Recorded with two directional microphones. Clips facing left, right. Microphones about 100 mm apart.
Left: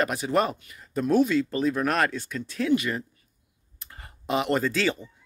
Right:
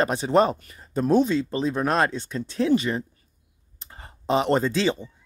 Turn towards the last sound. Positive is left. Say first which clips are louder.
# right 2 dB
turn(degrees=-25)  # may be behind; listen again after turning